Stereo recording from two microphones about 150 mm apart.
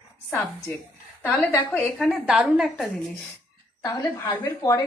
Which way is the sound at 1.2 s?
10° left (ahead or behind).